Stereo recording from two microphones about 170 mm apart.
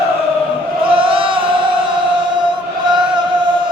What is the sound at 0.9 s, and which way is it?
Chant, 30° right (ahead or behind).